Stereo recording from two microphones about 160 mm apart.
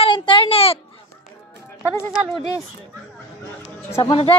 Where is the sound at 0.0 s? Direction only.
30° left (ahead or behind).